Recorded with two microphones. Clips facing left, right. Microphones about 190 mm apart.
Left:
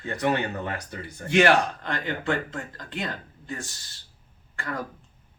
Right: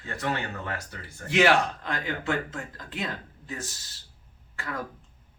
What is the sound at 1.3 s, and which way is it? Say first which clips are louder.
Speech: left 2 dB; centre (ahead or behind).